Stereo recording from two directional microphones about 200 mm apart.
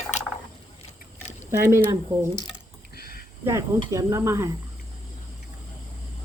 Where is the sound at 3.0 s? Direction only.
50° left (ahead or behind).